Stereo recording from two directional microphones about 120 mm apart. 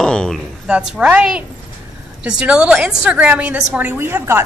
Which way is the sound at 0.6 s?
10° right (ahead or behind).